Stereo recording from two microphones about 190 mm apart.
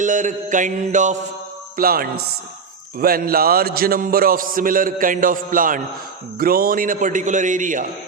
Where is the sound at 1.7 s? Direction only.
50° right (ahead or behind).